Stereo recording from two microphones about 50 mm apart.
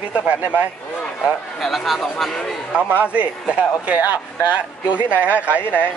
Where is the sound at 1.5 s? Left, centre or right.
Centre.